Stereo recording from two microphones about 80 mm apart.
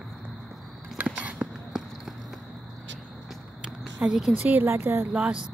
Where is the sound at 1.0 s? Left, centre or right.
Centre.